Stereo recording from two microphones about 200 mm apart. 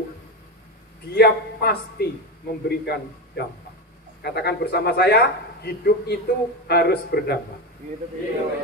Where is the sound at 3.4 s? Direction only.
55° left (ahead or behind).